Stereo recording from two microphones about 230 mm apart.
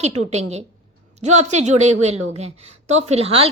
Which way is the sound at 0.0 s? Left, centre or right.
Right.